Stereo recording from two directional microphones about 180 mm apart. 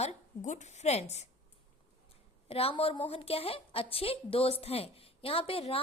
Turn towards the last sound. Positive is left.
turn(degrees=30)  # may be behind; listen again after turning